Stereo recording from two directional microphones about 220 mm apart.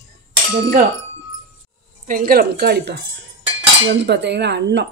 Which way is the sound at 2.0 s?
40° right (ahead or behind).